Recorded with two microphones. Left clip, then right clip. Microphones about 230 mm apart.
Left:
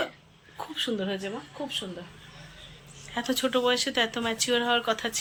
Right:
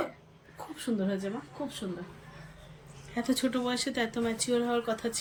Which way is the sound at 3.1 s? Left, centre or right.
Centre.